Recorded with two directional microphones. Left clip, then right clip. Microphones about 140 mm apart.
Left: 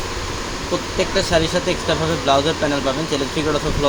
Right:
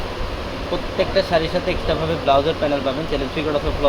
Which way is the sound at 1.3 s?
60° left (ahead or behind).